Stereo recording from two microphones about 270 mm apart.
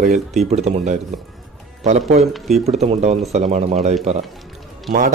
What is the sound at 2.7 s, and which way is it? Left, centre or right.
Speech, right.